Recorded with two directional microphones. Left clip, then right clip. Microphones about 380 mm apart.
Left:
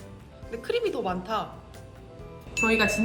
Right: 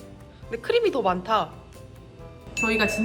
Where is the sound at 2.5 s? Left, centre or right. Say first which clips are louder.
Even; centre.